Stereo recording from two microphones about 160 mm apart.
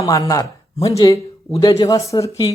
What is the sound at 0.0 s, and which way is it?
Speech, 20° left (ahead or behind).